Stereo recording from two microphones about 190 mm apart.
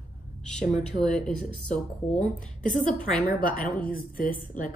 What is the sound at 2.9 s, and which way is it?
Speech, 5° left (ahead or behind).